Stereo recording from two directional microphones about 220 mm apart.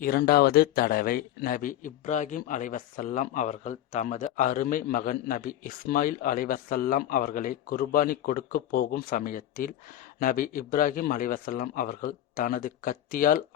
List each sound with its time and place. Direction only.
0.0 s a man's voice: 45° left (ahead or behind)